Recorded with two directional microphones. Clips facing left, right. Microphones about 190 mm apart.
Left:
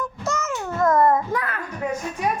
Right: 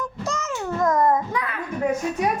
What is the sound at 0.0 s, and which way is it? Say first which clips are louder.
Music: left 1 dB; 15° right (ahead or behind).